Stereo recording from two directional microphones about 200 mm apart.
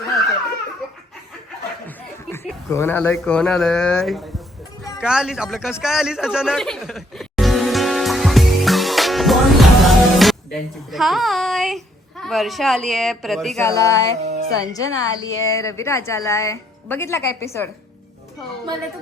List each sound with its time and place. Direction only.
2.3 s speech: 10° left (ahead or behind)
5.8 s music: centre (ahead or behind)
13.6 s a woman's voice: 15° left (ahead or behind)
14.3 s music: 55° right (ahead or behind)
14.6 s a woman's voice: 15° left (ahead or behind)